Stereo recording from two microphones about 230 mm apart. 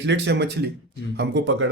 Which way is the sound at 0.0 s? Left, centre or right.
Right.